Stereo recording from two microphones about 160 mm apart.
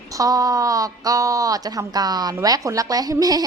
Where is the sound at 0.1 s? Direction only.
20° right (ahead or behind).